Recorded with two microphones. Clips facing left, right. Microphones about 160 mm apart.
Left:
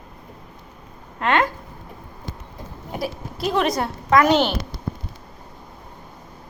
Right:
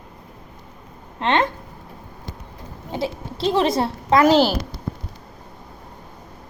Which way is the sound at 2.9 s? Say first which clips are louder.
Right 2 dB; 25° right (ahead or behind).